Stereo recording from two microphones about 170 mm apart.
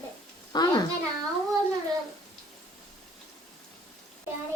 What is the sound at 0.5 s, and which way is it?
Speech, 25° left (ahead or behind).